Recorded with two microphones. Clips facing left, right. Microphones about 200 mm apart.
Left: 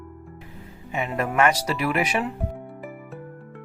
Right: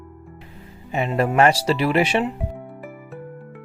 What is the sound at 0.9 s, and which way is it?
Speech, 30° right (ahead or behind).